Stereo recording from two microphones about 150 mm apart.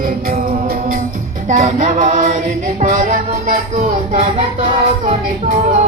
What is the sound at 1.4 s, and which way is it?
Music, 60° right (ahead or behind).